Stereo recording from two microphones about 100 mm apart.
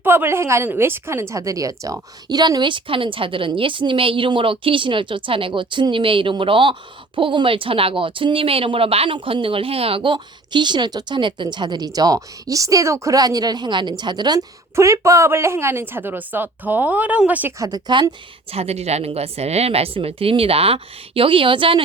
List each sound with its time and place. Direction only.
0.0 s a woman's voice: 20° right (ahead or behind); by 9.1 s 75° right (ahead or behind)
9.1 s speech: 60° right (ahead or behind); by 14.4 s 45° right (ahead or behind)
14.8 s speech: 30° right (ahead or behind); by 17.5 s 15° right (ahead or behind)
17.6 s speech: 40° right (ahead or behind)
18.5 s a woman's voice: 90° right; by 21.8 s 60° right (ahead or behind)